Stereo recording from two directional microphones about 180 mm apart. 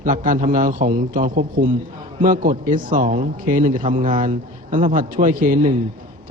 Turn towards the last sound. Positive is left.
turn(degrees=-50)  # may be behind; listen again after turning